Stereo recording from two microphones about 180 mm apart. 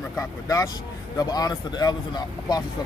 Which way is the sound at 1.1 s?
20° left (ahead or behind).